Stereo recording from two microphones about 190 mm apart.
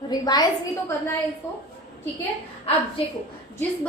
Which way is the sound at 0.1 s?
20° left (ahead or behind).